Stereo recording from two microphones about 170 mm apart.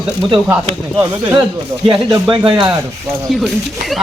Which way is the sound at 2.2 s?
30° right (ahead or behind).